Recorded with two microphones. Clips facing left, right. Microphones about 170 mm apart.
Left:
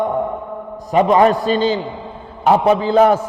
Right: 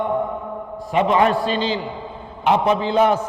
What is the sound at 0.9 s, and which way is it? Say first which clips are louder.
A man's voice: left 5 dB; 40° left (ahead or behind).